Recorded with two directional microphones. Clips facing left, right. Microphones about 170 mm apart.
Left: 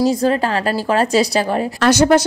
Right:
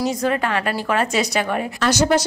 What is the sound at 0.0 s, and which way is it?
Speech, 30° left (ahead or behind).